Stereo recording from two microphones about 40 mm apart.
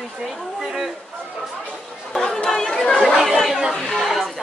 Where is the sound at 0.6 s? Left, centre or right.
Centre.